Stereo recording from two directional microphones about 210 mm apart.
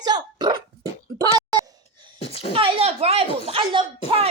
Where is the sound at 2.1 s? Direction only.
30° left (ahead or behind).